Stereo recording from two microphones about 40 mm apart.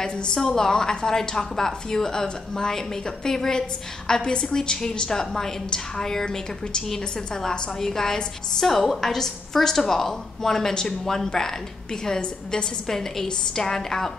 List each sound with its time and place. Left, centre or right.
0.0 s a woman's voice: centre
12.8 s a woman's voice: centre